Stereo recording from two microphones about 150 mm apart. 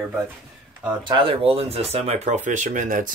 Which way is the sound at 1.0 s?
35° right (ahead or behind).